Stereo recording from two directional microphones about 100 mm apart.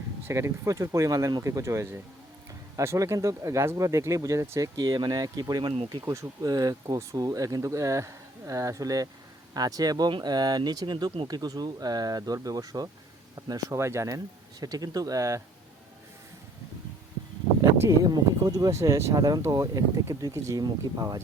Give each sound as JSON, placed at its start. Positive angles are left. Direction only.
{"t": 0.3, "sound": "speech", "side_deg": -25}
{"t": 17.7, "sound": "speech", "side_deg": -35}